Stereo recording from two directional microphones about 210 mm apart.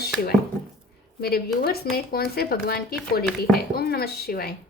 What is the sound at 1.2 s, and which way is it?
Speech, 45° left (ahead or behind).